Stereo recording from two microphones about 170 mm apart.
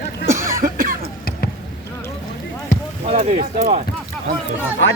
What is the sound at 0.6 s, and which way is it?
Cough, 50° right (ahead or behind).